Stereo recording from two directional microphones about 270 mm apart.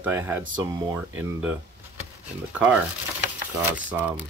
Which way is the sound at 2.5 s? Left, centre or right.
Centre.